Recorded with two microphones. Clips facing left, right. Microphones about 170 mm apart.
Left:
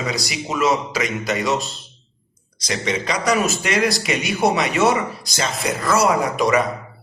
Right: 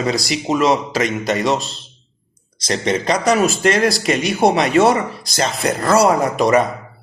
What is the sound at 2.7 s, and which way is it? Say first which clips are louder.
Speech: right 5 dB; 35° right (ahead or behind).